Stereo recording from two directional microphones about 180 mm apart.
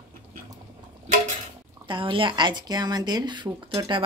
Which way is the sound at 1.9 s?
30° right (ahead or behind).